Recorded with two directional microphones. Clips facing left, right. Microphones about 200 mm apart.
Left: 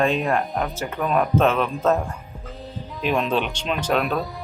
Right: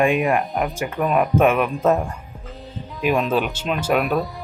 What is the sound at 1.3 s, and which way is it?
Speech, 10° right (ahead or behind).